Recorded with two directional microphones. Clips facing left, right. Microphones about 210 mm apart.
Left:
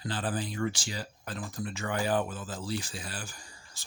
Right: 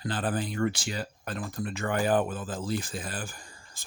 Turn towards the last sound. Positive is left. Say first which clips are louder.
# right 5 dB
turn(degrees=-55)  # may be behind; listen again after turning